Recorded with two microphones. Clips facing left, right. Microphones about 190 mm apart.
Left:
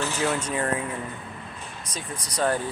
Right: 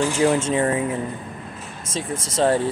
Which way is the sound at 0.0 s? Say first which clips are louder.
Right 8 dB; 15° right (ahead or behind).